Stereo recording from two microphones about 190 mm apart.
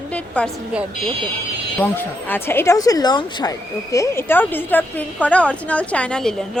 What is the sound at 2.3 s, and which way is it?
A woman's voice, 10° left (ahead or behind).